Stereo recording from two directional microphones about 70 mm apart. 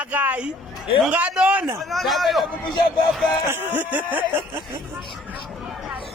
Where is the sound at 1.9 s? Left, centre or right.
Centre.